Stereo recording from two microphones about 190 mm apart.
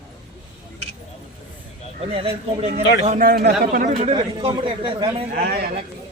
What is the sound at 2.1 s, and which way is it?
Speech, 30° right (ahead or behind).